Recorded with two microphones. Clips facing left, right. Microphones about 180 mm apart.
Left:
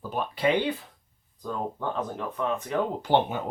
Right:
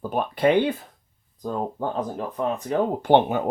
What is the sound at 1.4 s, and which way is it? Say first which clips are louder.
Speech: right 4 dB; 40° right (ahead or behind).